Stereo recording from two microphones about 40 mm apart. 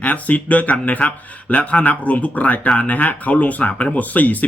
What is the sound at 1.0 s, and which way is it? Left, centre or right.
Speech, left.